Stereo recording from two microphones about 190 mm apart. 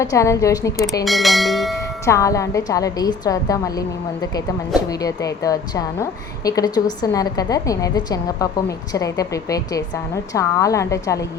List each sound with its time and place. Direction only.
0.0 s a woman's voice: 15° left (ahead or behind)
1.0 s speech: centre (ahead or behind)
2.0 s a woman's voice: 15° left (ahead or behind)